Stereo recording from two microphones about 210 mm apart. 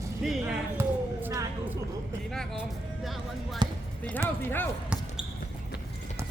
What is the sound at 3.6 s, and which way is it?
Speech, 20° right (ahead or behind).